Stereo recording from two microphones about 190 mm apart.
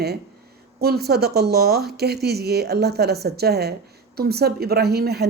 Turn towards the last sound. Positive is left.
turn(degrees=-55)  # may be behind; listen again after turning